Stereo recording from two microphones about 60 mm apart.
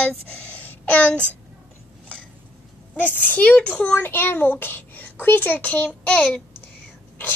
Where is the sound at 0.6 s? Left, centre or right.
Left.